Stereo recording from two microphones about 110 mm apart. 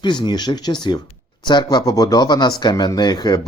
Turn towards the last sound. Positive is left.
turn(degrees=40)  # may be behind; listen again after turning